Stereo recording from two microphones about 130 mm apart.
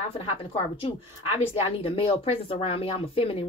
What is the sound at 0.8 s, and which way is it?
Speech, 45° left (ahead or behind).